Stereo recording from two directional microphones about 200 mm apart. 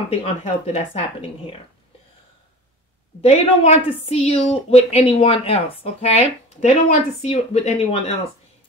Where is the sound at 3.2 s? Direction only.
30° left (ahead or behind).